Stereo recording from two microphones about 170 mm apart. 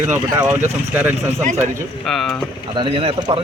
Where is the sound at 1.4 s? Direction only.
40° right (ahead or behind).